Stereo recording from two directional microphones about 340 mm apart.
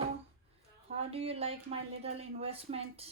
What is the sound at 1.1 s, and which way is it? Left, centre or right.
Speech, centre.